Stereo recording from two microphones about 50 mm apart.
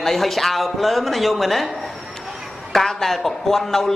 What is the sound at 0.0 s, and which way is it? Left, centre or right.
Speech, centre.